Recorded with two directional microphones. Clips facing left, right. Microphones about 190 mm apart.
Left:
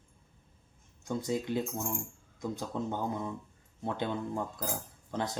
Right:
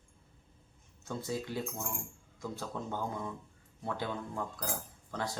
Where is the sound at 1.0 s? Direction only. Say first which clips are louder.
Left 4 dB; 15° left (ahead or behind).